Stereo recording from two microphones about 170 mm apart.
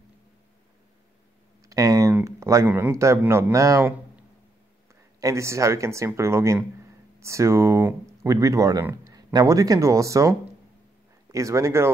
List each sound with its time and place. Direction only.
1.7 s a sound: 20° right (ahead or behind)
2.2 s speech: 20° right (ahead or behind)
5.2 s speech: 15° right (ahead or behind)
11.3 s speech: 20° right (ahead or behind)